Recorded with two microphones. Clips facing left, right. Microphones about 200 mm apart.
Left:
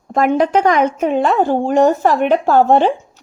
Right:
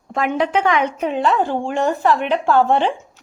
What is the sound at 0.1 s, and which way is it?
A woman's voice, 40° left (ahead or behind).